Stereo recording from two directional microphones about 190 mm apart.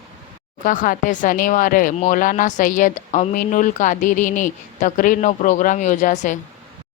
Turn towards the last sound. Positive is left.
turn(degrees=40)  # may be behind; listen again after turning